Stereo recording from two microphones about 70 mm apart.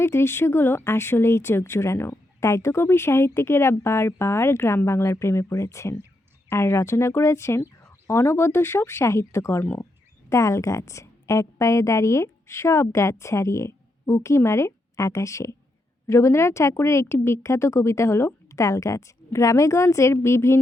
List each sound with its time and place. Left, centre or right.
0.0 s a woman's voice: left